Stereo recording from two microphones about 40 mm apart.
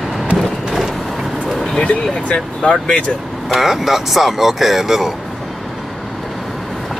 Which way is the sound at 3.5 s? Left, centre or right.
Centre.